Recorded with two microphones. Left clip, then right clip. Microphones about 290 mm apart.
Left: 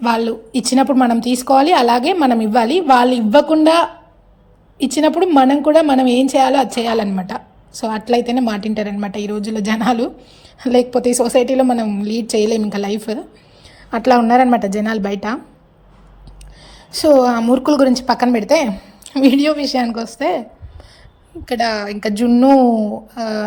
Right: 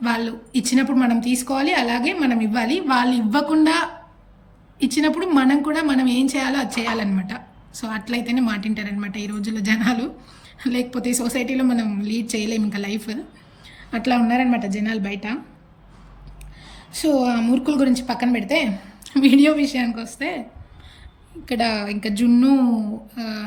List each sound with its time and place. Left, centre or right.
0.0 s a woman's voice: centre
16.9 s a woman's voice: centre
21.4 s a woman's voice: centre